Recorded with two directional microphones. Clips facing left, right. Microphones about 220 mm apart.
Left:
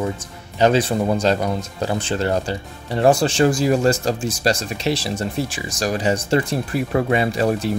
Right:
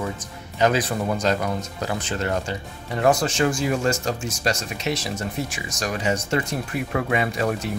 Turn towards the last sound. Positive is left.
turn(degrees=30)  # may be behind; listen again after turning